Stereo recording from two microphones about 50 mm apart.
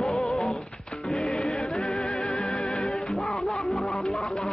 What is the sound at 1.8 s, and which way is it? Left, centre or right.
Music, centre.